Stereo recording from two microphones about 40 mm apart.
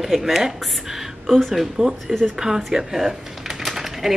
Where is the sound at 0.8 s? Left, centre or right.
Centre.